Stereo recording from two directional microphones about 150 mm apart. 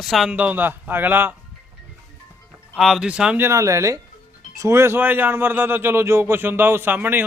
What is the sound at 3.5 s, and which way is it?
A man's voice, 20° right (ahead or behind).